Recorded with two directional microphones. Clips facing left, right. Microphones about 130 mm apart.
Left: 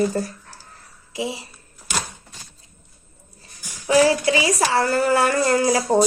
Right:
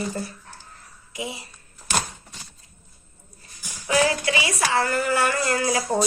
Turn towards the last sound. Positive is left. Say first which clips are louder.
# left 5 dB
turn(degrees=30)  # may be behind; listen again after turning